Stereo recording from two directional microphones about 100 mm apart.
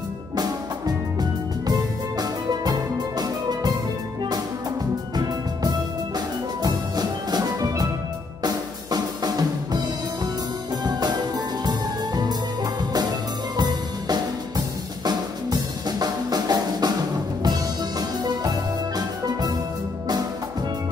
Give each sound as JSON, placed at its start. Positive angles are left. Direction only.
{"t": 1.7, "sound": "music", "side_deg": -40}
{"t": 6.1, "sound": "music", "side_deg": -45}
{"t": 8.4, "sound": "drum kit", "side_deg": -40}
{"t": 10.8, "sound": "music", "side_deg": -45}
{"t": 13.6, "sound": "music", "side_deg": -45}
{"t": 15.0, "sound": "drum kit", "side_deg": -40}
{"t": 17.4, "sound": "music", "side_deg": -40}